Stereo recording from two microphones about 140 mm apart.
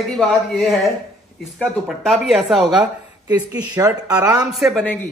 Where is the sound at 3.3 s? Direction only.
30° right (ahead or behind).